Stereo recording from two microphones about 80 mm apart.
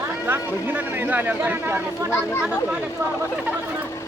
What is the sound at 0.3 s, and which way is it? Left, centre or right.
Speech, right.